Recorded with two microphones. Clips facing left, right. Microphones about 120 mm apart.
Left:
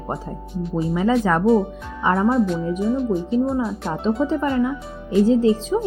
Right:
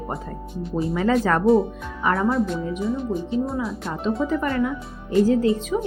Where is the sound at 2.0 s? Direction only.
25° left (ahead or behind).